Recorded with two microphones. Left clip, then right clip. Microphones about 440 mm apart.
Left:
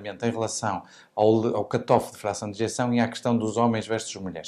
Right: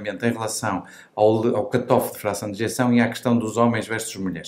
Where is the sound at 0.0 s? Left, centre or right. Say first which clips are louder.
Right 3 dB; left.